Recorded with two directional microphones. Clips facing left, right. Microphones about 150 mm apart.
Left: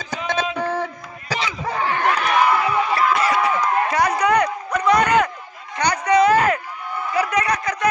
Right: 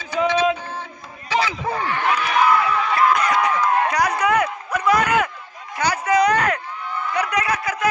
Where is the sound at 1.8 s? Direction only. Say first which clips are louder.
Left 3 dB; 45° left (ahead or behind).